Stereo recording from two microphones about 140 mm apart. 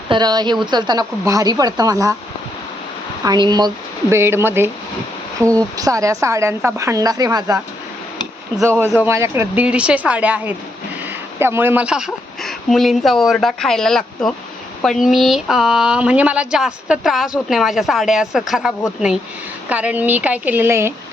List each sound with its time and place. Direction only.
0.1 s speech: 30° right (ahead or behind)
3.2 s speech: 30° right (ahead or behind)
4.1 s speech: 15° right (ahead or behind)
9.0 s speech: 20° right (ahead or behind)